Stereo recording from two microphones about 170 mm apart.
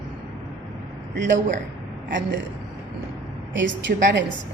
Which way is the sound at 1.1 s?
90° right.